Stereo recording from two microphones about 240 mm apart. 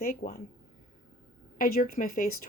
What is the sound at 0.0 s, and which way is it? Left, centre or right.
Speech, left.